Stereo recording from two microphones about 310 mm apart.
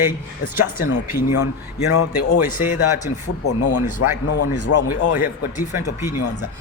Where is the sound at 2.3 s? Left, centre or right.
Left.